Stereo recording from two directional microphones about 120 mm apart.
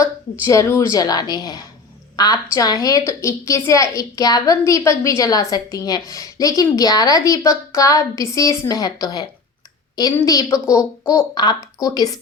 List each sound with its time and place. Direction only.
0.0 s a woman's voice: 25° left (ahead or behind)